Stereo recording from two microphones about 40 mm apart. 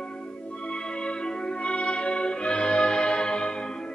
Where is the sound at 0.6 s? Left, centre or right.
Left.